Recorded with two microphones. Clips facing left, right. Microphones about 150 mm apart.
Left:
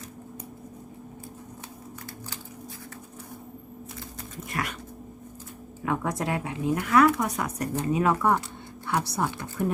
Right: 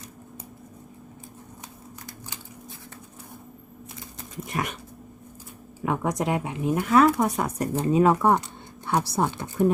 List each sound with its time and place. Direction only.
4.4 s dog: 20° right (ahead or behind)
5.8 s speech: 20° right (ahead or behind)